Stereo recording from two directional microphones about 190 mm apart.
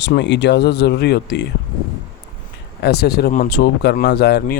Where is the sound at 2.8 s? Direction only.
55° left (ahead or behind).